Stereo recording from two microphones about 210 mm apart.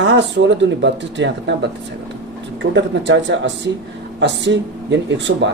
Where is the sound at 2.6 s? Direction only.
60° right (ahead or behind).